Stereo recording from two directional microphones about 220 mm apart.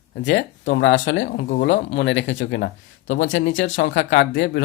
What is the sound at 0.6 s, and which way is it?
Speech, 40° left (ahead or behind).